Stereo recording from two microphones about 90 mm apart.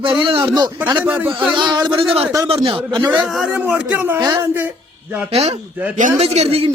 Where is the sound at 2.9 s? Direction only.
55° right (ahead or behind).